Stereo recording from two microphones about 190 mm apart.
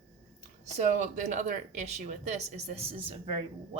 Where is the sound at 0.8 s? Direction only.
40° right (ahead or behind).